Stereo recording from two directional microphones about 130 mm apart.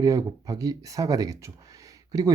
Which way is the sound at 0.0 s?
25° right (ahead or behind).